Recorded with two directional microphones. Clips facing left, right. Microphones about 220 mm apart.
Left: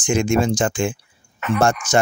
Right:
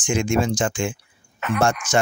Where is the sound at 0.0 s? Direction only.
40° left (ahead or behind).